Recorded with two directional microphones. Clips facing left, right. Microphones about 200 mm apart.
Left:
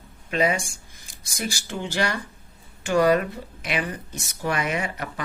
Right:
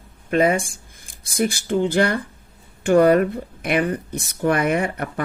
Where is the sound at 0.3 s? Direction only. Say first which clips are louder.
Right 5 dB; 50° right (ahead or behind).